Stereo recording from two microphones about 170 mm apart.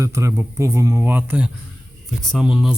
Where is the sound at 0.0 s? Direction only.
15° right (ahead or behind).